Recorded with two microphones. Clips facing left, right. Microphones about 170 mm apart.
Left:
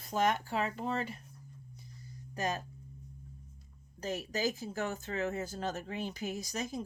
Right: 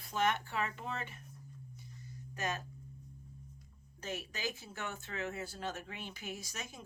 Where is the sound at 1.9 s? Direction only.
35° left (ahead or behind).